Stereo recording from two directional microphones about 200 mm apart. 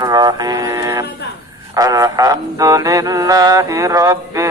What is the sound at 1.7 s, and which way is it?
Mantra, 20° right (ahead or behind).